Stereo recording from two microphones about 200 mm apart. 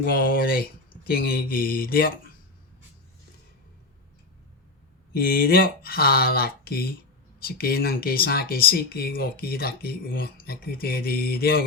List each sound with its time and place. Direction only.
0.0 s speech: 45° left (ahead or behind)
5.1 s speech: 50° left (ahead or behind)